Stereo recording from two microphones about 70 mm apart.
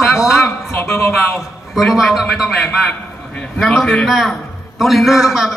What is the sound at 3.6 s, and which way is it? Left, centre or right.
Speech, centre.